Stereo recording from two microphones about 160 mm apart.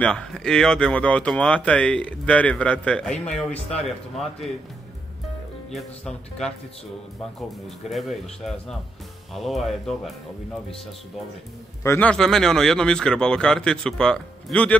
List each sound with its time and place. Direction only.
0.0 s speech: 5° left (ahead or behind)
5.7 s speech: centre (ahead or behind)
7.3 s speech: centre (ahead or behind)
11.8 s a man's voice: 15° left (ahead or behind)
12.1 s speech: 5° left (ahead or behind)